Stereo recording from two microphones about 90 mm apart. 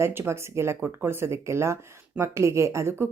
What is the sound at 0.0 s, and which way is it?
A woman's voice, 25° right (ahead or behind).